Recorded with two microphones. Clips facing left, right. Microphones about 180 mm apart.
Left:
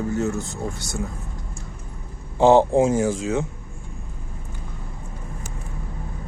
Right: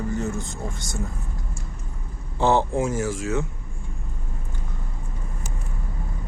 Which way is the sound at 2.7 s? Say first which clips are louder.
Left 6 dB; 25° left (ahead or behind).